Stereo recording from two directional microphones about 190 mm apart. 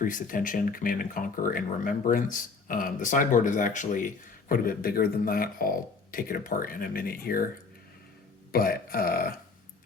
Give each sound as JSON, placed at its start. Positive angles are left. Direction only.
{"t": 0.0, "sound": "speech", "side_deg": 45}
{"t": 8.5, "sound": "speech", "side_deg": 50}